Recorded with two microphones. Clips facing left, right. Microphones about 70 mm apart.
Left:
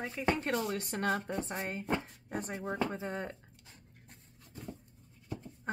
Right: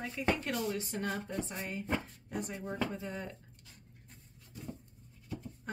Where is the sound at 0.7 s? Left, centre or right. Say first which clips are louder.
Left 3 dB; left.